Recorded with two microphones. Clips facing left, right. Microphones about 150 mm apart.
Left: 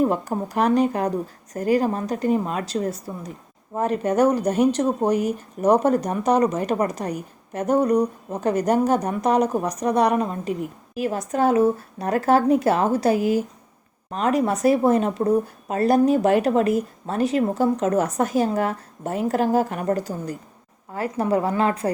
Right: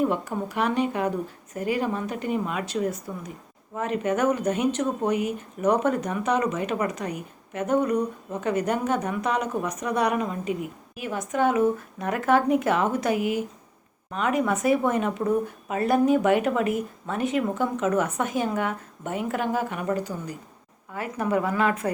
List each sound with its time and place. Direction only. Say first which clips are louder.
0.0 s speech: left 3 dB; 40° left (ahead or behind)